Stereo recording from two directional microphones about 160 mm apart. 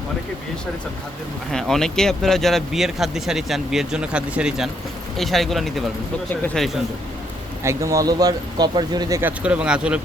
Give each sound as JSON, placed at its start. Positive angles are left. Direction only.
{"t": 1.5, "sound": "speech", "side_deg": 0}
{"t": 7.6, "sound": "speech", "side_deg": -20}
{"t": 9.4, "sound": "speech", "side_deg": -5}